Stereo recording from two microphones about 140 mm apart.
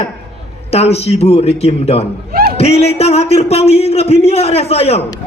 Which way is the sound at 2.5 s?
50° left (ahead or behind).